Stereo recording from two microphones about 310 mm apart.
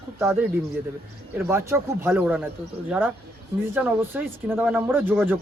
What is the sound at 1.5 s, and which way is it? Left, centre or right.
Speech, centre.